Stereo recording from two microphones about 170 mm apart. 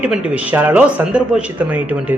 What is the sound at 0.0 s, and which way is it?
Speech, 10° right (ahead or behind).